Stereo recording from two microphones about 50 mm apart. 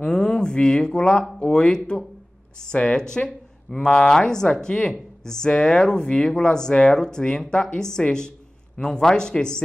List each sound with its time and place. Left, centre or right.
0.0 s speech: centre